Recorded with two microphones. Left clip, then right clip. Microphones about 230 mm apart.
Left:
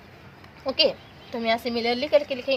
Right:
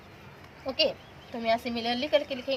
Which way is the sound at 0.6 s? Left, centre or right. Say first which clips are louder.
Left 5 dB; left.